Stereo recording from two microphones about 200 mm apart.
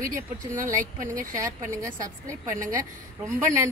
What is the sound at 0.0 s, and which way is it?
Speech, 40° right (ahead or behind).